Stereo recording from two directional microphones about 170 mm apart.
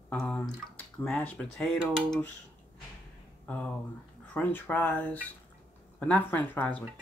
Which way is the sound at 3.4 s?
10° left (ahead or behind).